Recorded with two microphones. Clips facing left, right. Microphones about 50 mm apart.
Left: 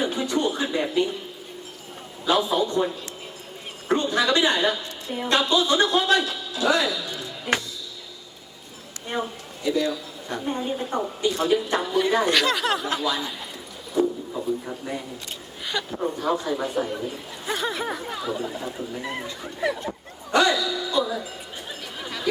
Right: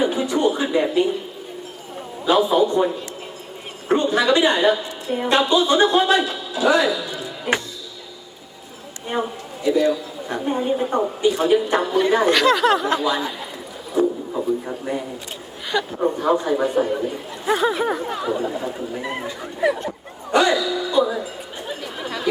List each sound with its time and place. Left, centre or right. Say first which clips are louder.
0.0 s a sound: right 5 dB; centre
2.2 s a woman's voice: right 5 dB; centre
9.0 s a woman's voice: right 4 dB; centre
12.2 s speech: right 6 dB; centre
13.1 s speech: right 5 dB; centre
13.9 s a sound: right 4 dB; centre
15.8 s a woman's voice: right 5 dB; right
20.3 s music: right 3 dB; centre
21.7 s chatter: right 6 dB; centre